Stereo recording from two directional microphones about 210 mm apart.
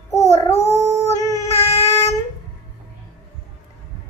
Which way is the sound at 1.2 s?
15° left (ahead or behind).